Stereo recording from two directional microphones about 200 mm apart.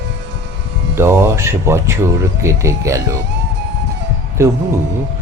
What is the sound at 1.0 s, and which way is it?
Speech, 15° right (ahead or behind).